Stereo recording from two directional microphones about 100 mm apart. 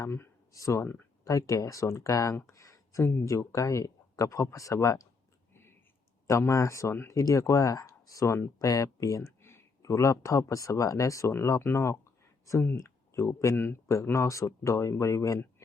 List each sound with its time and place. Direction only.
0.5 s speech: 30° left (ahead or behind)
6.2 s speech: 30° left (ahead or behind)
12.5 s a sound: 30° left (ahead or behind)
13.2 s speech: 25° left (ahead or behind)